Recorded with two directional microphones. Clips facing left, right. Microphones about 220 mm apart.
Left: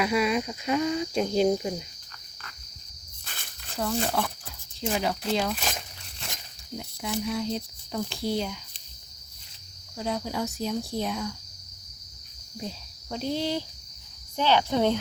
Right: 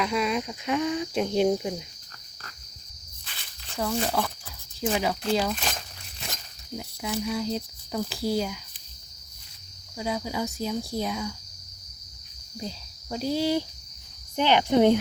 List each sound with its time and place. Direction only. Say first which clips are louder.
0.0 s speech: left 2 dB; 5° left (ahead or behind)
3.2 s cricket: left 3 dB; 50° left (ahead or behind)
4.1 s speech: right 1 dB; 5° right (ahead or behind)
6.7 s speech: right 1 dB; centre (ahead or behind)
10.0 s speech: even; 5° right (ahead or behind)
12.5 s speech: right 1 dB; centre (ahead or behind)
14.3 s cricket: right 3 dB; 15° right (ahead or behind)